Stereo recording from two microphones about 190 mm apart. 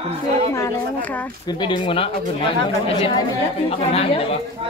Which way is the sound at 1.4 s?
25° left (ahead or behind).